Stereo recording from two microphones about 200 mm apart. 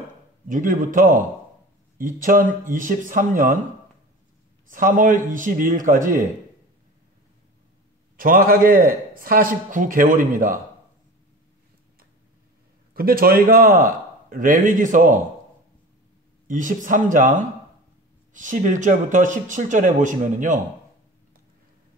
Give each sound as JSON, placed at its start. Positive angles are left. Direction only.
{"t": 0.5, "sound": "speech", "side_deg": -40}
{"t": 4.6, "sound": "speech", "side_deg": -40}
{"t": 8.2, "sound": "a man's voice", "side_deg": -45}
{"t": 12.9, "sound": "a man's voice", "side_deg": -45}
{"t": 16.4, "sound": "speech", "side_deg": -40}